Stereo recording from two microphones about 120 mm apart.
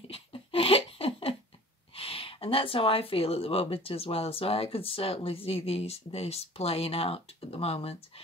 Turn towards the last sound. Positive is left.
turn(degrees=55)  # may be behind; listen again after turning